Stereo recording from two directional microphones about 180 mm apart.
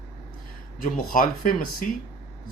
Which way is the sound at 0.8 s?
50° left (ahead or behind).